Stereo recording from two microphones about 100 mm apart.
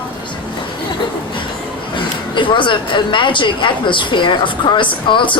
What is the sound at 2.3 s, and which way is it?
A woman's voice, 55° left (ahead or behind).